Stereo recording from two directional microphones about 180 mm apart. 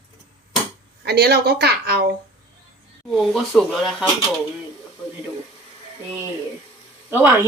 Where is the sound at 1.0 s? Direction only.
60° right (ahead or behind).